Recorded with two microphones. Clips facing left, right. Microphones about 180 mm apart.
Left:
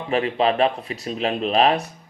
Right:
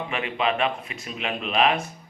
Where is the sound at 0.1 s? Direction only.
35° left (ahead or behind).